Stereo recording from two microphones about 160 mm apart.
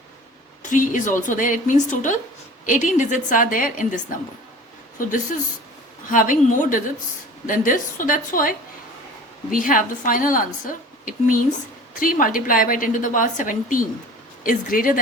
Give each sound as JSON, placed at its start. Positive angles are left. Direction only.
{"t": 0.6, "sound": "a woman's voice", "side_deg": 50}